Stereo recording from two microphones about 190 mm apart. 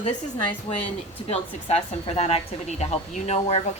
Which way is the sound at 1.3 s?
35° left (ahead or behind).